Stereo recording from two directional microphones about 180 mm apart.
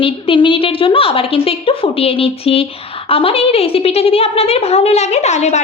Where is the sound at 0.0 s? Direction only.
30° left (ahead or behind).